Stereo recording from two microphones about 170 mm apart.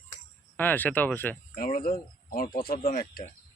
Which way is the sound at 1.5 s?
60° left (ahead or behind).